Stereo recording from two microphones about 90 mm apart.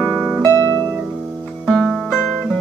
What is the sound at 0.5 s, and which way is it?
Music, 45° right (ahead or behind).